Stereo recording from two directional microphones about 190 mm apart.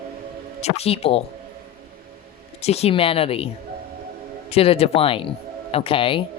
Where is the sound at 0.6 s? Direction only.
35° left (ahead or behind).